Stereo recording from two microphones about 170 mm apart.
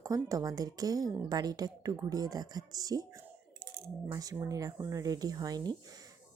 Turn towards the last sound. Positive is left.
turn(degrees=-25)  # may be behind; listen again after turning